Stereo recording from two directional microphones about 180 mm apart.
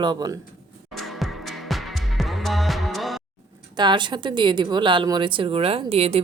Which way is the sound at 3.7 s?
25° right (ahead or behind).